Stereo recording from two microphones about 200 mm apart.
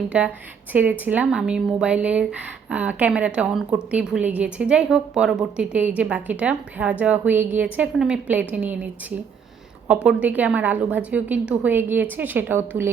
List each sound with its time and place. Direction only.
0.1 s a woman's voice: 5° right (ahead or behind)